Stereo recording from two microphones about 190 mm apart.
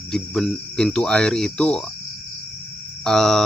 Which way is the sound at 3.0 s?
5° left (ahead or behind).